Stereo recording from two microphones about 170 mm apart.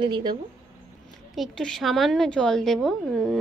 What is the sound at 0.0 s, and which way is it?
Speech, 25° right (ahead or behind).